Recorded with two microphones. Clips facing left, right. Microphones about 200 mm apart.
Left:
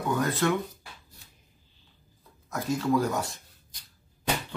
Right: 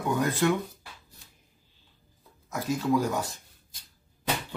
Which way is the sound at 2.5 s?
5° right (ahead or behind).